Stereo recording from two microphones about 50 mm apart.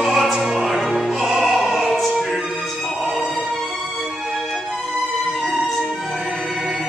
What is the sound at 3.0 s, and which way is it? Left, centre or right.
Music, centre.